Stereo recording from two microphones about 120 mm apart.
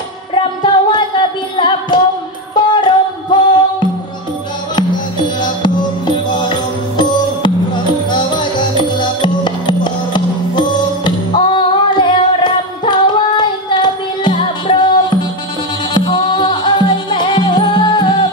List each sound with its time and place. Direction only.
0.3 s music: 45° left (ahead or behind)
4.7 s music: 40° left (ahead or behind)
7.0 s music: 40° left (ahead or behind)